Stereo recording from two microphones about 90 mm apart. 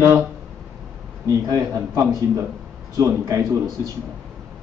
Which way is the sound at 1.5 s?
35° right (ahead or behind).